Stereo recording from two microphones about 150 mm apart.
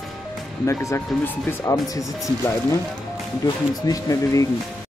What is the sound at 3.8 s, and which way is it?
Speech, 25° left (ahead or behind).